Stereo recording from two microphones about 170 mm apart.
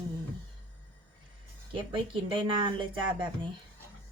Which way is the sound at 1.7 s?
30° right (ahead or behind).